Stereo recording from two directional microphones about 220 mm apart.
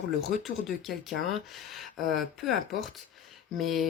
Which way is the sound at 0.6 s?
Centre (ahead or behind).